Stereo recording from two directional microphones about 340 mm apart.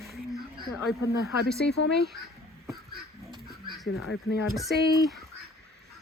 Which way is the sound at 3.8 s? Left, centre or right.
Left.